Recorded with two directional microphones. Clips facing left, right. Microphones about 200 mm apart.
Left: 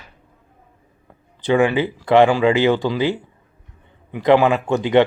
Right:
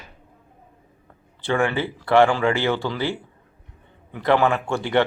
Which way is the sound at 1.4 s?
15° left (ahead or behind).